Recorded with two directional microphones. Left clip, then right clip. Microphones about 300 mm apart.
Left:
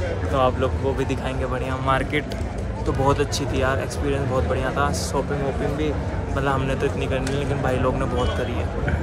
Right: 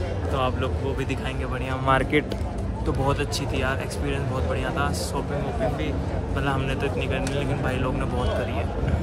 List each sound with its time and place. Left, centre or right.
0.3 s speech: centre
1.9 s speech: right
3.1 s speech: centre
6.4 s speech: centre